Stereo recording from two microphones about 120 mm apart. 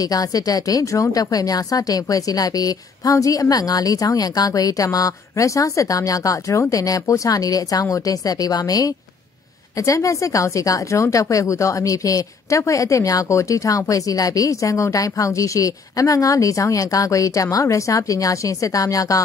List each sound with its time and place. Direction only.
0.0 s a woman's voice: 30° left (ahead or behind)